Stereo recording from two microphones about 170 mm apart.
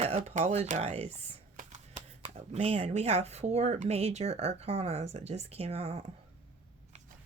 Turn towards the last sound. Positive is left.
turn(degrees=-35)  # may be behind; listen again after turning